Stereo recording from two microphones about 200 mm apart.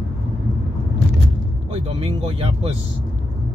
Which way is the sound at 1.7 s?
30° right (ahead or behind).